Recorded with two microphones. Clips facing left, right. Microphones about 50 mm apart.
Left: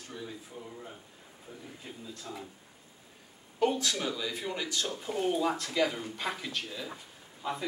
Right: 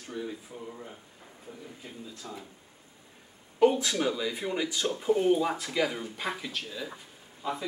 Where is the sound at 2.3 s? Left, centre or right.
Centre.